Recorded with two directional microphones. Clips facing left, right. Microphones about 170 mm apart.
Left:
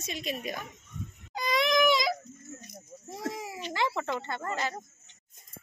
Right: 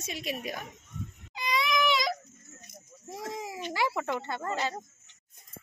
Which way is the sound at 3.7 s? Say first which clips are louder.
Even; 10° right (ahead or behind).